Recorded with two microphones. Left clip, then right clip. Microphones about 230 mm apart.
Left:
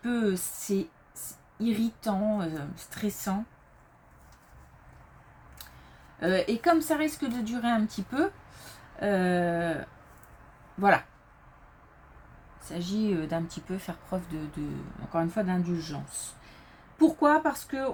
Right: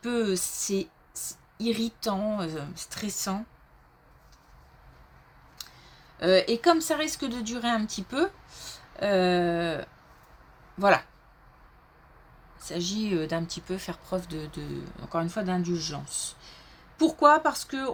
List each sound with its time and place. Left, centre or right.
0.0 s a woman's voice: right
6.1 s a woman's voice: right
12.5 s a woman's voice: right